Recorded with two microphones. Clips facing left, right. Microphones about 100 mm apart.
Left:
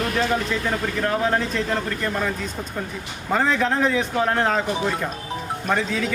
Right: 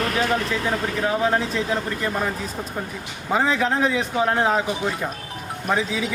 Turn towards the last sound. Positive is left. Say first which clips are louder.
# even
turn(degrees=-5)  # may be behind; listen again after turning